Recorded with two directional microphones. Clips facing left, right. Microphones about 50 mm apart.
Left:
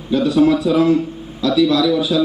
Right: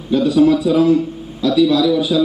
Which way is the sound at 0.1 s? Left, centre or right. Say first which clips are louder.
Right 1 dB; centre.